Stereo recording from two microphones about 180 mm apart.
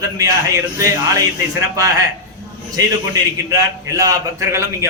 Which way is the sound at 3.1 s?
20° right (ahead or behind).